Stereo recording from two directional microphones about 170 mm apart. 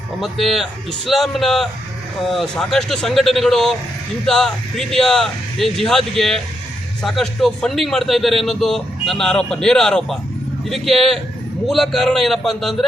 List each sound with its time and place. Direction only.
0.2 s a man's voice: centre (ahead or behind)